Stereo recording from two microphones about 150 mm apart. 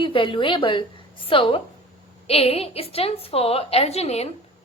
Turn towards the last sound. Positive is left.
turn(degrees=45)  # may be behind; listen again after turning